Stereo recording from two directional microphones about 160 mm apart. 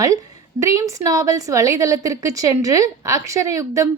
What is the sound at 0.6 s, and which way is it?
A woman's voice, 20° right (ahead or behind).